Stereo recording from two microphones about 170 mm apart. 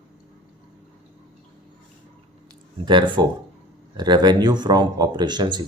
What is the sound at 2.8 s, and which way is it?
Speech, 30° right (ahead or behind).